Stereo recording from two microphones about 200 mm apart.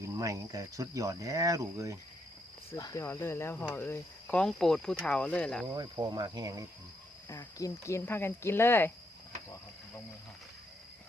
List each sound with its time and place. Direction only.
0.2 s speech: 15° right (ahead or behind)
2.7 s speech: 15° left (ahead or behind)
5.6 s speech: 20° right (ahead or behind)
7.3 s speech: 15° left (ahead or behind)